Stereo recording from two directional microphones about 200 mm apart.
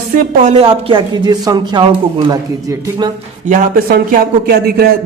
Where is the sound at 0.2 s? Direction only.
35° right (ahead or behind); by 3.1 s 20° right (ahead or behind).